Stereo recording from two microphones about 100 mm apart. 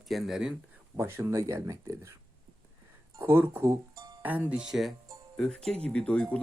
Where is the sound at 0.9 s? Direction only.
25° right (ahead or behind).